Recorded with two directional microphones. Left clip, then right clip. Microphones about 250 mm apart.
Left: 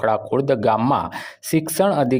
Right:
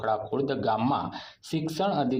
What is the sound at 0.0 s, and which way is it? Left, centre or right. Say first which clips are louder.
Speech: left 8 dB; left.